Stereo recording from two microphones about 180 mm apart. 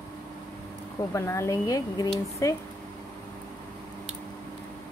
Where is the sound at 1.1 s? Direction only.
15° left (ahead or behind).